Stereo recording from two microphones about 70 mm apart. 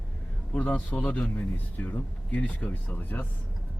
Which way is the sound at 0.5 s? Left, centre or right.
Left.